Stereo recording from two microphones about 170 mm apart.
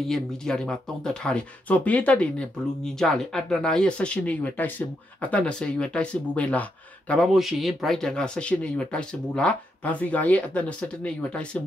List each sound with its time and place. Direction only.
0.0 s speech: centre (ahead or behind)